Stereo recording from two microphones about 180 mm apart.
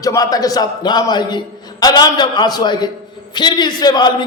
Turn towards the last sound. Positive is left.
turn(degrees=20)  # may be behind; listen again after turning